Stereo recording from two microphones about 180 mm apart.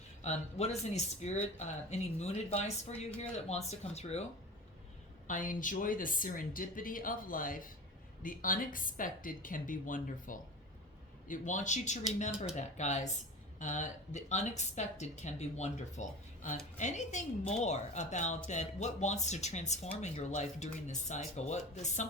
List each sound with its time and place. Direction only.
0.2 s speech: 35° left (ahead or behind)
5.3 s speech: 45° left (ahead or behind)